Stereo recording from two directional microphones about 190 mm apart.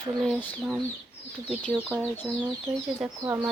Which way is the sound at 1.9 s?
10° left (ahead or behind).